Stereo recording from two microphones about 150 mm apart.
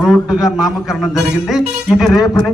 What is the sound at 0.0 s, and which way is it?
A man's voice, 5° right (ahead or behind).